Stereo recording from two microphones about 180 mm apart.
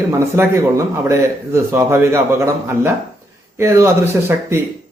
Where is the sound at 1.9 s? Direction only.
15° right (ahead or behind).